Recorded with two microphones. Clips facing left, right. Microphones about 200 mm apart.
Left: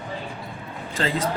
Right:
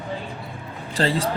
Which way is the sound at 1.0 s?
35° right (ahead or behind).